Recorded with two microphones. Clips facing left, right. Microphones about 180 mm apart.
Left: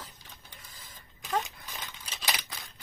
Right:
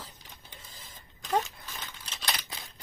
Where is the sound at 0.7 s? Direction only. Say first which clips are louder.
Right 1 dB; 25° right (ahead or behind).